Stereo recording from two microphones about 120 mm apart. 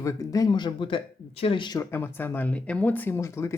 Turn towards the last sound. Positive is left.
turn(degrees=25)  # may be behind; listen again after turning